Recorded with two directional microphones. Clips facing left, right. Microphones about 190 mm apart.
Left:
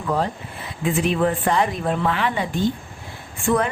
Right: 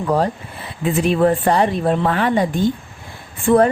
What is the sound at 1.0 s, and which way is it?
A woman's voice, 40° right (ahead or behind).